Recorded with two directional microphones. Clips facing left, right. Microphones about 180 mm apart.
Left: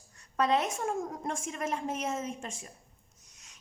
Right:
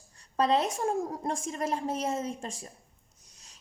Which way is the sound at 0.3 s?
30° right (ahead or behind).